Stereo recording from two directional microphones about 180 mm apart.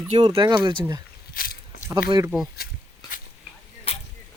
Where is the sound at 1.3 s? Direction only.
55° left (ahead or behind).